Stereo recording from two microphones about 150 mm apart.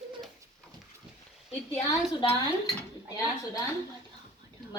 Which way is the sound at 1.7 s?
45° left (ahead or behind).